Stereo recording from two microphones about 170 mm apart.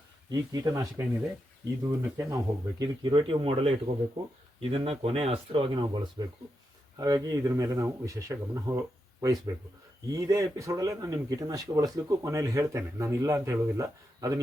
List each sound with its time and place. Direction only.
0.3 s a man's voice: 20° right (ahead or behind)
10.1 s a man's voice: 20° right (ahead or behind)